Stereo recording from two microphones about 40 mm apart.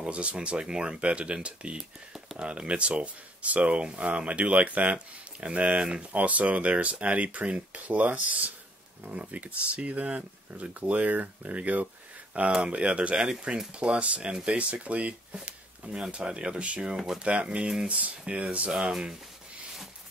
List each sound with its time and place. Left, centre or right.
0.0 s speech: right
6.1 s speech: right
12.6 s speech: right
15.3 s speech: right
16.9 s speech: centre
17.2 s speech: right
18.8 s speech: centre